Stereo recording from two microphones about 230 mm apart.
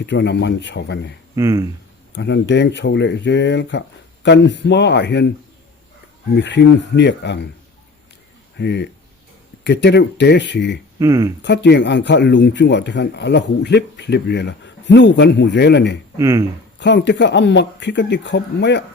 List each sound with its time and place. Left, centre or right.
0.0 s speech: left
1.4 s speech: centre
2.1 s speech: left
6.3 s speech: left
8.5 s speech: left
11.0 s speech: centre
11.4 s speech: left
16.1 s speech: centre
16.8 s speech: left